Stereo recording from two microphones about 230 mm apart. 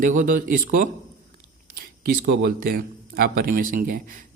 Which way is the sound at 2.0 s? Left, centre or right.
Right.